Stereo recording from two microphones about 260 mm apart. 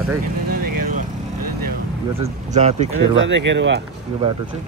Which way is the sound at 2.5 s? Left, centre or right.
Right.